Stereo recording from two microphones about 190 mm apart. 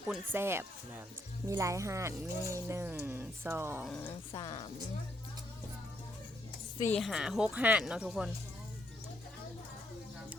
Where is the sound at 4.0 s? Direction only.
15° left (ahead or behind).